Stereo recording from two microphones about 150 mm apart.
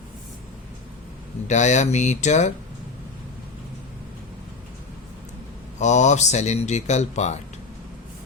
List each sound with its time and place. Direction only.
1.5 s speech: 50° left (ahead or behind)
5.8 s speech: 50° left (ahead or behind)